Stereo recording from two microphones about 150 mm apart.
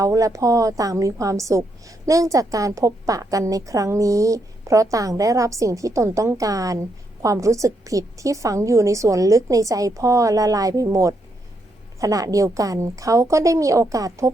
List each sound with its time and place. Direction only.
0.0 s a woman's voice: 20° right (ahead or behind)